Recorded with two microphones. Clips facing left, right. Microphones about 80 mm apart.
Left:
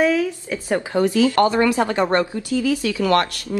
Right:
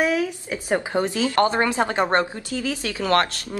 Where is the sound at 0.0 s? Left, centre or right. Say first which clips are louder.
Left 3 dB; right.